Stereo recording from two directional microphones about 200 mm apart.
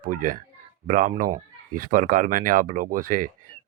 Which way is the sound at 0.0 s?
45° right (ahead or behind).